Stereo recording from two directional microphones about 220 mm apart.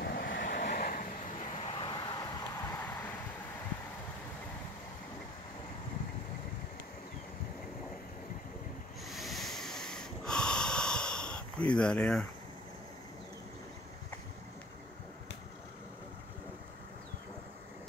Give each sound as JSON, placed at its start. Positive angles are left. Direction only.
{"t": 0.0, "sound": "vehicle", "side_deg": 45}
{"t": 1.7, "sound": "vehicle", "side_deg": 20}
{"t": 9.0, "sound": "snort", "side_deg": 0}